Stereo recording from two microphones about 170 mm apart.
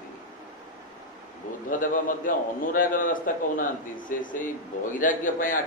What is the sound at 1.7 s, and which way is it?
A man's voice, 50° left (ahead or behind).